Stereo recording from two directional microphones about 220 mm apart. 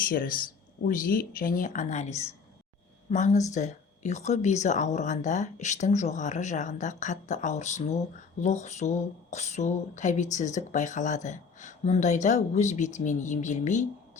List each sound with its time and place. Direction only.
0.0 s speech: 40° left (ahead or behind)